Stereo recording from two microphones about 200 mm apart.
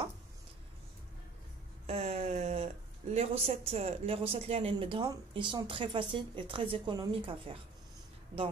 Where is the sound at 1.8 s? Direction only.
30° right (ahead or behind).